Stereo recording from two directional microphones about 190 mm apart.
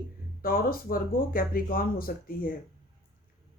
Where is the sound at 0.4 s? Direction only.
50° left (ahead or behind).